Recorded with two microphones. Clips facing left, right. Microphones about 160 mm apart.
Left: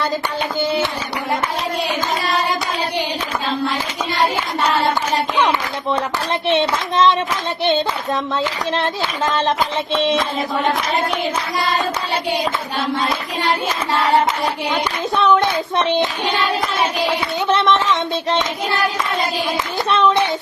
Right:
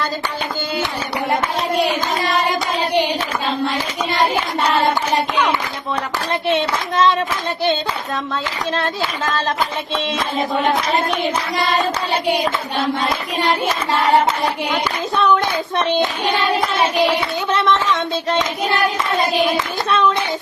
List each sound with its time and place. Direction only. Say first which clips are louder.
6.5 s speech: left 2 dB; 20° left (ahead or behind)
8.7 s speech: left 1 dB; 20° left (ahead or behind)
15.7 s speech: right 1 dB; 20° left (ahead or behind)
16.2 s child singing: right 1 dB; 45° right (ahead or behind)
17.5 s speech: left 1 dB; 20° left (ahead or behind)